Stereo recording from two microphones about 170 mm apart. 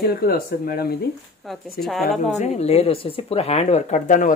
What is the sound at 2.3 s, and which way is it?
Speech, 40° left (ahead or behind).